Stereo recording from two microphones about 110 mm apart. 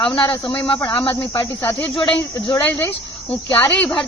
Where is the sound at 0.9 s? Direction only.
45° left (ahead or behind).